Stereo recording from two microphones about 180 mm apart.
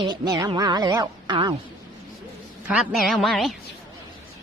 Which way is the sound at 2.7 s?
Centre (ahead or behind).